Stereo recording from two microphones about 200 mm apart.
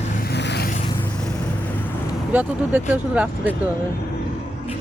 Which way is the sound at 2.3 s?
10° right (ahead or behind).